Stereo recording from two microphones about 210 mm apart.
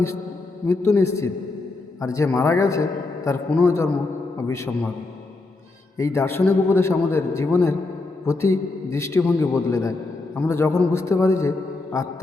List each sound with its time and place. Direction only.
0.7 s a man's voice: 15° left (ahead or behind)
6.0 s a man's voice: 15° left (ahead or behind)